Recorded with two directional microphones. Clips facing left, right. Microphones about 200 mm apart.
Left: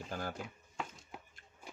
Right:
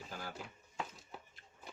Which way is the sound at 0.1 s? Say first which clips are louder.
Left 7 dB; 50° left (ahead or behind).